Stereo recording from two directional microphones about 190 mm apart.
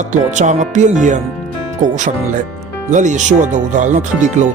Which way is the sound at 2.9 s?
40° right (ahead or behind).